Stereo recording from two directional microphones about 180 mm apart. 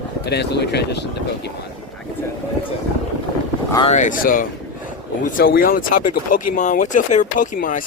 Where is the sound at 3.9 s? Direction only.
45° left (ahead or behind).